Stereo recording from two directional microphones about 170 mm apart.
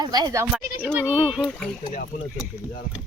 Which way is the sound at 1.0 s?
5° right (ahead or behind).